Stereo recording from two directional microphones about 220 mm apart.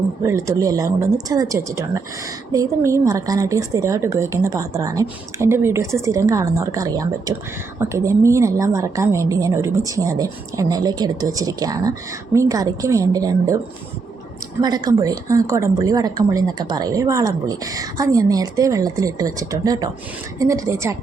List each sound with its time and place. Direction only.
0.2 s a woman's voice: 15° right (ahead or behind)
14.6 s a woman's voice: 20° right (ahead or behind)